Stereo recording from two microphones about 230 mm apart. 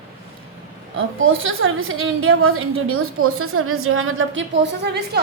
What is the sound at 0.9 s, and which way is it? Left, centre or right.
A woman's voice, right.